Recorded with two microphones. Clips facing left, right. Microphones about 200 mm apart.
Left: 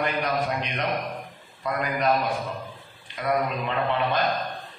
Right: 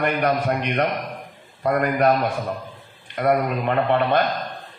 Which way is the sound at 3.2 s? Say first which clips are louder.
Right 5 dB; 55° right (ahead or behind).